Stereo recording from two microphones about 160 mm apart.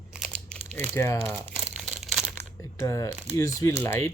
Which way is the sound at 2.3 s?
15° left (ahead or behind).